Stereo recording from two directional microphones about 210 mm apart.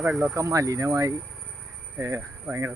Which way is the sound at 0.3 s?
15° right (ahead or behind).